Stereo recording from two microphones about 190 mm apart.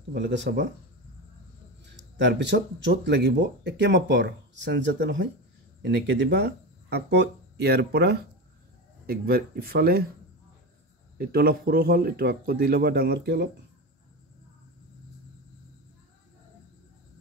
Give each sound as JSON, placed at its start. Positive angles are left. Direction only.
{"t": 0.1, "sound": "speech", "side_deg": -65}
{"t": 2.0, "sound": "speech", "side_deg": -70}
{"t": 11.1, "sound": "speech", "side_deg": -50}